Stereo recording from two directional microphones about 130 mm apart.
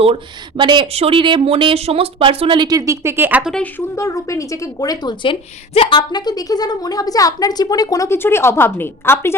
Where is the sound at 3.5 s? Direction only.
10° left (ahead or behind); by 4.9 s 25° left (ahead or behind).